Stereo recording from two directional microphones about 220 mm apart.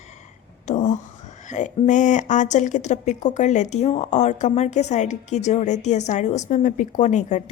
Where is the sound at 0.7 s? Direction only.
30° left (ahead or behind).